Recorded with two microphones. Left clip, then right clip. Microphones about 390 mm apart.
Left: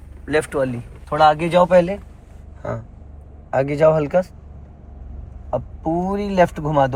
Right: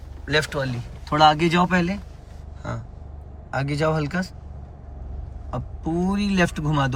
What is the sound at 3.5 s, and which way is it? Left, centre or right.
Speech, centre.